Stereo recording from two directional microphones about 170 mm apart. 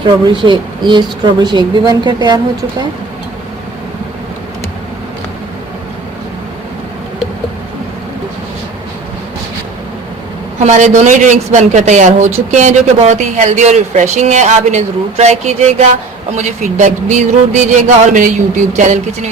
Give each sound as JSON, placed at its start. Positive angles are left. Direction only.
{"t": 0.0, "sound": "speech", "side_deg": -30}
{"t": 10.6, "sound": "a woman's voice", "side_deg": -45}